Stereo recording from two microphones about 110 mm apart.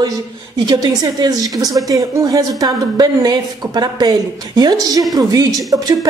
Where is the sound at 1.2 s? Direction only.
35° right (ahead or behind).